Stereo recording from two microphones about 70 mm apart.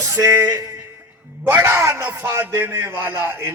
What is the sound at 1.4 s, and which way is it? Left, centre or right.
Speech, right.